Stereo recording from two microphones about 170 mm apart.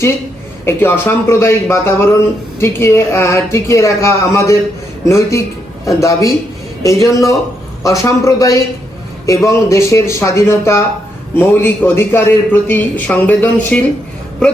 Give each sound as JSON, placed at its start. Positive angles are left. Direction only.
{"t": 0.6, "sound": "a man's voice", "side_deg": 15}